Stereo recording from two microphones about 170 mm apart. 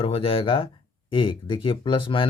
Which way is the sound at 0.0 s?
35° left (ahead or behind).